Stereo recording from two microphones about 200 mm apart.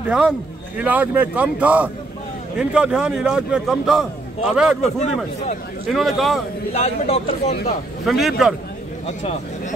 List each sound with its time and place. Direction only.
0.0 s a man's voice: 5° right (ahead or behind)
6.7 s speech: 30° left (ahead or behind)
8.0 s a man's voice: centre (ahead or behind)
9.0 s speech: 35° left (ahead or behind)